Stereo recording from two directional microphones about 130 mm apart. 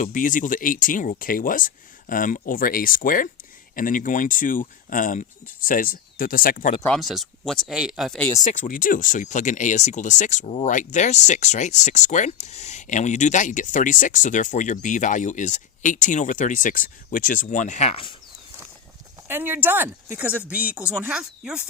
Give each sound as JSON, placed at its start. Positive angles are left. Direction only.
{"t": 0.0, "sound": "speech", "side_deg": 90}
{"t": 6.8, "sound": "speech", "side_deg": 0}
{"t": 8.4, "sound": "speech", "side_deg": 85}
{"t": 19.3, "sound": "speech", "side_deg": -15}